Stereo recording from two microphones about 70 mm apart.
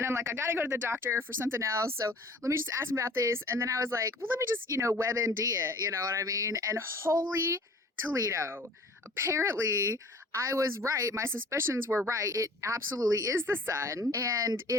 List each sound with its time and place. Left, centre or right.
0.0 s a woman's voice: right
12.1 s a woman's voice: right
13.3 s a woman's voice: right